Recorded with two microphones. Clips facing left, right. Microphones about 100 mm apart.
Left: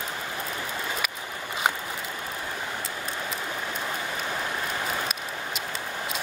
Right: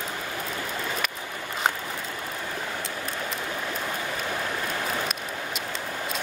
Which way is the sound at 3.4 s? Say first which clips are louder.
Right 1 dB; 10° left (ahead or behind).